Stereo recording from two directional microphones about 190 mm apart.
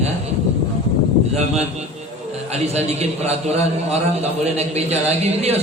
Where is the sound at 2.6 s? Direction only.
35° right (ahead or behind).